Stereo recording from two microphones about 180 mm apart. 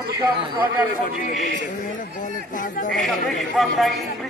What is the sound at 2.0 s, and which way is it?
Speech, 45° left (ahead or behind).